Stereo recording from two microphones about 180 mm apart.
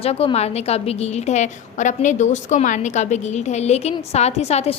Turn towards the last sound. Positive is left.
turn(degrees=35)  # may be behind; listen again after turning